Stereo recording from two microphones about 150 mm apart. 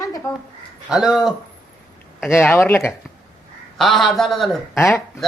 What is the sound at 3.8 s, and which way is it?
Speech, centre (ahead or behind).